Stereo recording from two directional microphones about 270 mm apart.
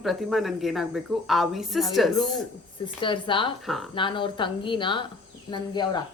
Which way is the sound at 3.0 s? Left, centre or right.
Centre.